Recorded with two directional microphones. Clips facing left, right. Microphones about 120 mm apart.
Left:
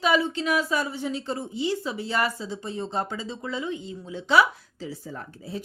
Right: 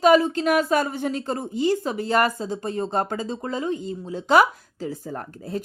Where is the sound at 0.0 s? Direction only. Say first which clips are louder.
Right 7 dB; 45° right (ahead or behind).